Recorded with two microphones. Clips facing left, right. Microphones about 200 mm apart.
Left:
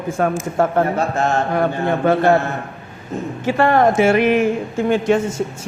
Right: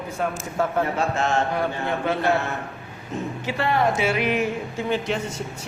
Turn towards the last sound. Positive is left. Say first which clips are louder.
# left 9 dB
turn(degrees=50)  # may be behind; listen again after turning